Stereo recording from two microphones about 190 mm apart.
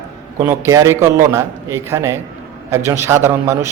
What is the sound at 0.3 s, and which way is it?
A man's voice, 15° right (ahead or behind).